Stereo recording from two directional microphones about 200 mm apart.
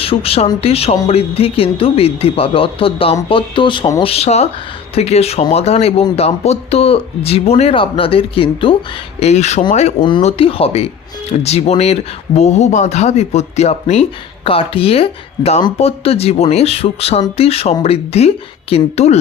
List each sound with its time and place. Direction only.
0.0 s speech: 30° left (ahead or behind)
4.0 s speech: 30° left (ahead or behind)
10.0 s speech: 20° left (ahead or behind)